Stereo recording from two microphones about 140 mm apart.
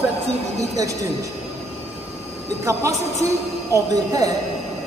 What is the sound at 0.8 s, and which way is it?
Speech, 25° right (ahead or behind).